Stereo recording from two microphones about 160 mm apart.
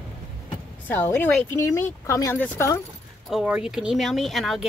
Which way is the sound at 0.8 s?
15° left (ahead or behind).